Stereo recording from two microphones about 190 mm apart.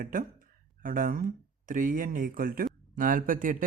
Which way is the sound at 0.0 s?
45° right (ahead or behind).